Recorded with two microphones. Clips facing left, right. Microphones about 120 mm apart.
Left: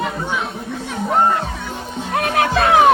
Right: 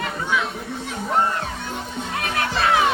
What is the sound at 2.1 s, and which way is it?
Music, 50° left (ahead or behind).